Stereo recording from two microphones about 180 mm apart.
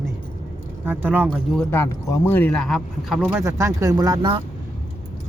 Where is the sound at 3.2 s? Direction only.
10° right (ahead or behind).